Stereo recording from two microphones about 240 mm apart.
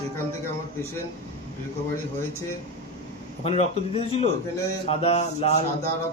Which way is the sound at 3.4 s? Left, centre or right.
Left.